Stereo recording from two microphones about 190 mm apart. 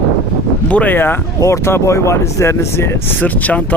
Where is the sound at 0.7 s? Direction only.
10° left (ahead or behind).